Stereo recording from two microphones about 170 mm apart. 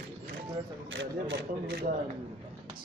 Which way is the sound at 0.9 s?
90° right.